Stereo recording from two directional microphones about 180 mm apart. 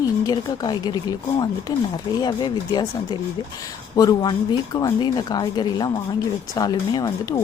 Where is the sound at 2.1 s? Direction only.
20° left (ahead or behind).